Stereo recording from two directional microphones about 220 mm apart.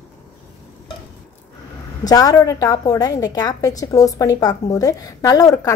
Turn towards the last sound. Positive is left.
turn(degrees=15)  # may be behind; listen again after turning